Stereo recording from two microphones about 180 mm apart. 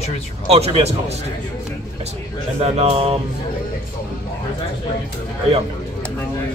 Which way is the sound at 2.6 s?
30° right (ahead or behind).